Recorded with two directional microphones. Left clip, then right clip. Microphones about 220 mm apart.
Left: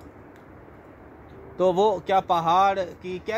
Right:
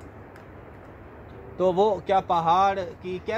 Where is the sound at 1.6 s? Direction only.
50° left (ahead or behind).